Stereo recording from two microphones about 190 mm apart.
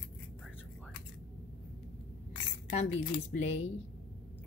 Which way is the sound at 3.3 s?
45° left (ahead or behind).